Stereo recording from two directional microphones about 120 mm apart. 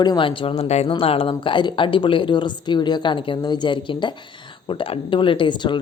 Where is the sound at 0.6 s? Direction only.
65° left (ahead or behind).